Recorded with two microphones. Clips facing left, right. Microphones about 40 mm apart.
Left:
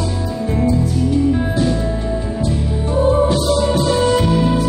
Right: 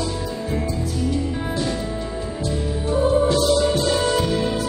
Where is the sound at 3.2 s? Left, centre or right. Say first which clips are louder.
Left 2 dB; centre.